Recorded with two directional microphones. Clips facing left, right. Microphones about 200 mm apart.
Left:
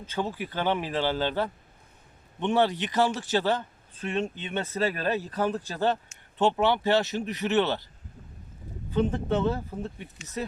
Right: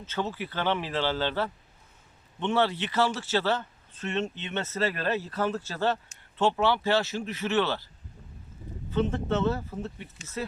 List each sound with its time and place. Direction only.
0.0 s a man's voice: 15° left (ahead or behind)
8.9 s a man's voice: 15° left (ahead or behind)